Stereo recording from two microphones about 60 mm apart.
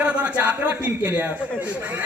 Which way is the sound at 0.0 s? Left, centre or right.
Right.